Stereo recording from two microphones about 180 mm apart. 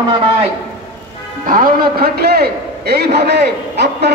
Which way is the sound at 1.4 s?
50° right (ahead or behind).